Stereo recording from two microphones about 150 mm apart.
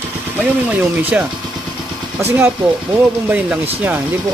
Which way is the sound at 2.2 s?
15° right (ahead or behind).